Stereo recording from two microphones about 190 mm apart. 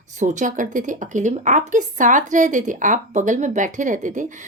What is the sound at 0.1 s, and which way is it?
A woman's voice, 40° right (ahead or behind).